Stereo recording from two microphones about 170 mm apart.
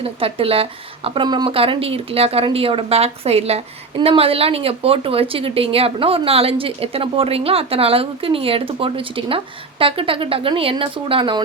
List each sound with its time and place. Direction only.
0.0 s speech: 35° right (ahead or behind)